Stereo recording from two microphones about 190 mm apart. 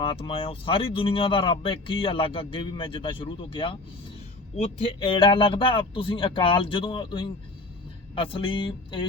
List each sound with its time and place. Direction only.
0.0 s speech: 30° left (ahead or behind)